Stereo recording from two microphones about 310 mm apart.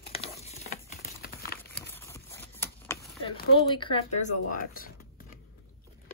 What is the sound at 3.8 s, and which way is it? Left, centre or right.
Speech, centre.